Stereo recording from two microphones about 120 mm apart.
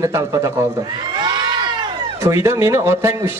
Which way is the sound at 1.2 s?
40° right (ahead or behind).